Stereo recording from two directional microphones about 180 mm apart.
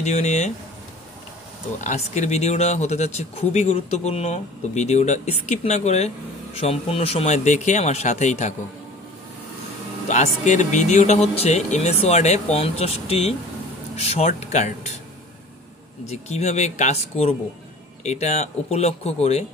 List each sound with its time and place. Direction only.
0.0 s speech: 40° left (ahead or behind)
1.8 s speech: 40° left (ahead or behind)
10.0 s speech: 40° left (ahead or behind)
16.1 s speech: 40° left (ahead or behind)